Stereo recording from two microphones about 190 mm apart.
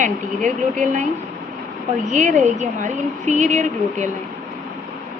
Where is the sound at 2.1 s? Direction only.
40° right (ahead or behind).